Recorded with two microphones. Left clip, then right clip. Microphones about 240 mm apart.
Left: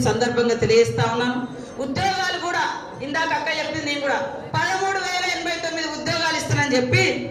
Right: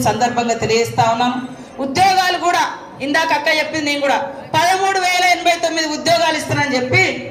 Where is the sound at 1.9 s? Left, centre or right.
Right.